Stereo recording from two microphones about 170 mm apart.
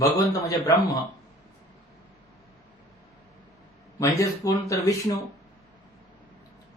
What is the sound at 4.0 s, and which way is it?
A man's voice, 20° left (ahead or behind).